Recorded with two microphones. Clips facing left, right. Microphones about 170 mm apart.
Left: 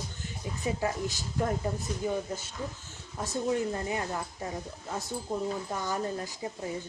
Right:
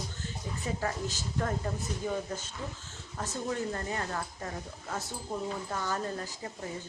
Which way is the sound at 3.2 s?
15° left (ahead or behind).